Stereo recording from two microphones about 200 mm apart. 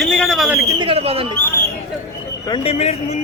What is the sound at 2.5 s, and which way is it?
Speech, 30° left (ahead or behind).